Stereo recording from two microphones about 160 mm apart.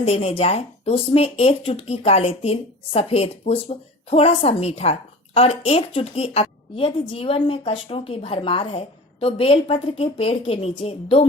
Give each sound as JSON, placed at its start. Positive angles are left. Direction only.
{"t": 0.0, "sound": "speech", "side_deg": 35}